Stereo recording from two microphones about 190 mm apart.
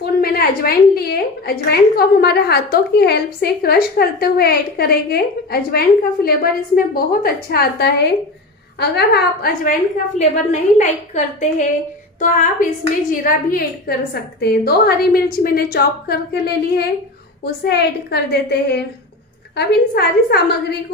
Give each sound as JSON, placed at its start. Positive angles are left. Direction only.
{"t": 0.0, "sound": "a woman's voice", "side_deg": 55}
{"t": 10.1, "sound": "a woman's voice", "side_deg": 35}
{"t": 17.4, "sound": "a woman's voice", "side_deg": 60}